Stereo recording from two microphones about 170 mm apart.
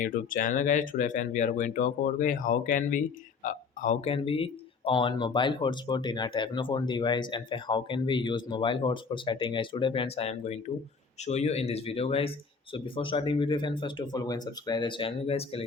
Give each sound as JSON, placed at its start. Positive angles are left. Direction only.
{"t": 0.0, "sound": "speech", "side_deg": 50}
{"t": 4.1, "sound": "speech", "side_deg": 35}